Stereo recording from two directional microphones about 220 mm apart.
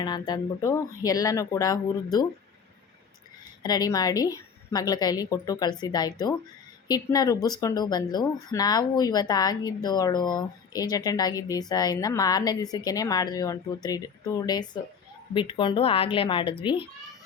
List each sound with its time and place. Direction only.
0.0 s speech: 20° left (ahead or behind)
3.6 s speech: 20° left (ahead or behind)